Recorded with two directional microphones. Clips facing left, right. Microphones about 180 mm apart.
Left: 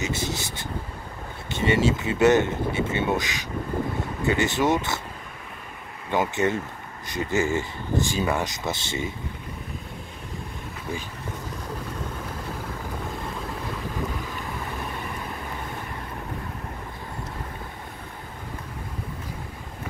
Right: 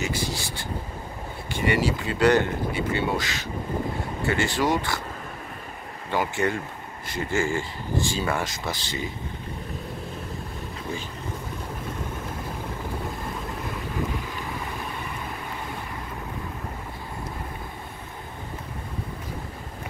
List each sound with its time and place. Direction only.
0.0 s vehicle: 20° left (ahead or behind)
1.5 s speech: 25° left (ahead or behind)
6.0 s speech: 20° left (ahead or behind)